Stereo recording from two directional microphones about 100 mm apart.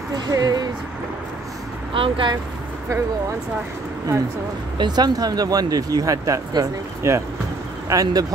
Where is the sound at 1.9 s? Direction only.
60° right (ahead or behind).